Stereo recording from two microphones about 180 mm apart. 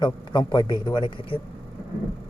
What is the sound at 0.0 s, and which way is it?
A man's voice, 25° left (ahead or behind).